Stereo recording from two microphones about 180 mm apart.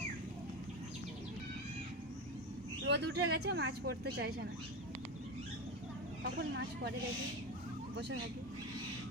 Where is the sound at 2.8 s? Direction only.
70° right (ahead or behind).